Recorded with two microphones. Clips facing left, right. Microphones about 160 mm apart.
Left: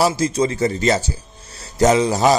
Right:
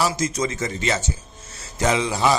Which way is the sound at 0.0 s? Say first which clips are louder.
Left 5 dB; 30° left (ahead or behind).